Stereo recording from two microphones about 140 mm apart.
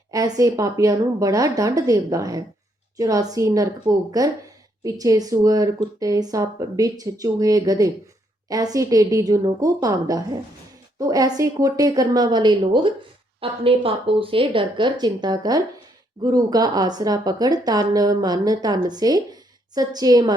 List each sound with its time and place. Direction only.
0.1 s a woman's voice: 25° right (ahead or behind)